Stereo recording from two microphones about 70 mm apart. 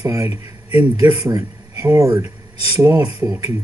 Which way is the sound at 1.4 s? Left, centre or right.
Right.